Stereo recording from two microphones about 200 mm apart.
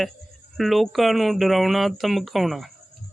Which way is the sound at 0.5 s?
Centre (ahead or behind).